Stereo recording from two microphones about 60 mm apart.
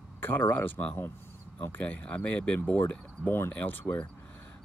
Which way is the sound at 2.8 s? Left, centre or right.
Left.